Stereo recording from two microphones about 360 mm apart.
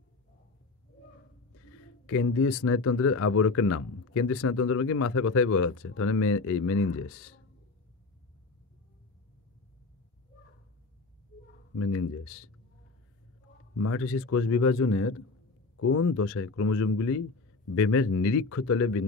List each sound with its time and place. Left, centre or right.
1.5 s speech: left
11.7 s speech: left
13.7 s speech: left